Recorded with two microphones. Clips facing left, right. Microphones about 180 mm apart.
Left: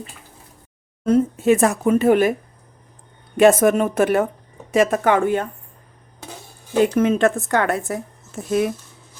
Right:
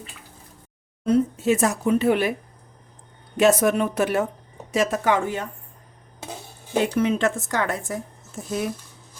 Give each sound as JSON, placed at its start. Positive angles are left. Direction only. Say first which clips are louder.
{"t": 1.0, "sound": "speech", "louder": "left 4 dB", "side_deg": 50}
{"t": 3.3, "sound": "a woman's voice", "louder": "left 5 dB", "side_deg": 55}
{"t": 6.9, "sound": "a woman's voice", "louder": "left 4 dB", "side_deg": 50}